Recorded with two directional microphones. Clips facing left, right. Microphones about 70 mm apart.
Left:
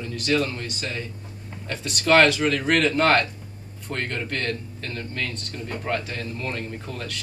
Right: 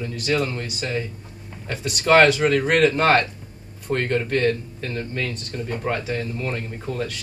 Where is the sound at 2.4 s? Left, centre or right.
Centre.